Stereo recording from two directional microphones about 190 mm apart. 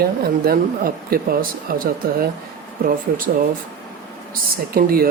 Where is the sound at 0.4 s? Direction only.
50° right (ahead or behind).